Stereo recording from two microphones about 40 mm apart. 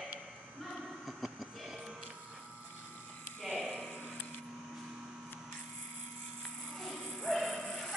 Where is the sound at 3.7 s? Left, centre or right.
Left.